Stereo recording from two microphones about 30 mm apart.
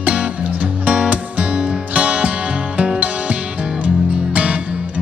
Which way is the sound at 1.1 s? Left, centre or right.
Right.